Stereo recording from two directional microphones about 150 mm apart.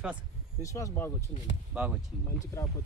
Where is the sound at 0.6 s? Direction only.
20° left (ahead or behind).